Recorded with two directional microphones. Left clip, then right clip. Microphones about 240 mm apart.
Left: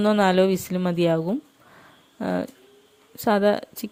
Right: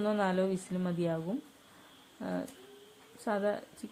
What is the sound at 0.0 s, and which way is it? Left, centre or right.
Speech, left.